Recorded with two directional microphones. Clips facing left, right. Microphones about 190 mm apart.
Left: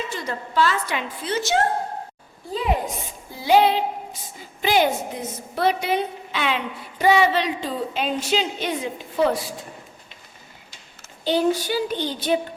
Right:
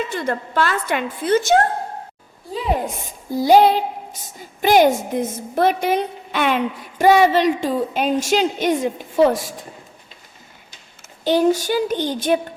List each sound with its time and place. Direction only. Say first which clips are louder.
0.1 s a woman's voice: right 5 dB; 55° right (ahead or behind)
3.2 s music: right 5 dB; 40° right (ahead or behind)
4.6 s a woman's voice: right 6 dB; 50° right (ahead or behind)
11.3 s a woman's voice: right 4 dB; 45° right (ahead or behind)